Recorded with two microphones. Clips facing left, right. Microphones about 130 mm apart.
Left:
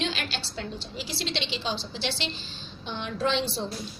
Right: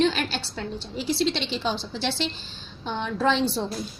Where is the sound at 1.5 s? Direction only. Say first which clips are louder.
Right 4 dB; 50° right (ahead or behind).